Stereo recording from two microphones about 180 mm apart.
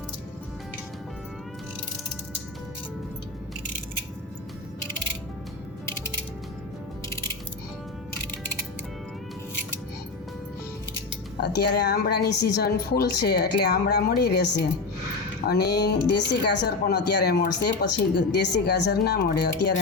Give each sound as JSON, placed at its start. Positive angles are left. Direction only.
{"t": 11.3, "sound": "speech", "side_deg": 65}